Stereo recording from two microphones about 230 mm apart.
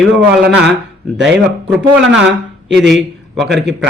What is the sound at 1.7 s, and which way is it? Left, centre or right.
Speech, centre.